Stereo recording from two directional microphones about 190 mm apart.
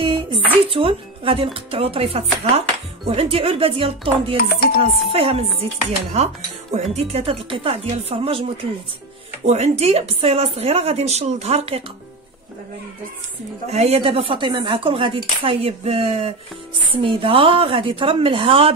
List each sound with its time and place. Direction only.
0.0 s a sound: 25° right (ahead or behind)
0.7 s speech: 30° right (ahead or behind)
9.5 s speech: 35° right (ahead or behind)
13.7 s speech: 35° right (ahead or behind)